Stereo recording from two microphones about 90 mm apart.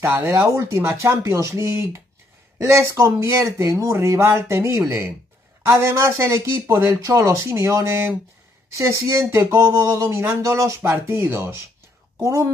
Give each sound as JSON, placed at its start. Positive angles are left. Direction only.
{"t": 0.0, "sound": "speech", "side_deg": -25}